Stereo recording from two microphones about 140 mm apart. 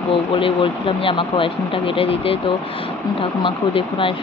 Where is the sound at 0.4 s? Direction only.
40° left (ahead or behind).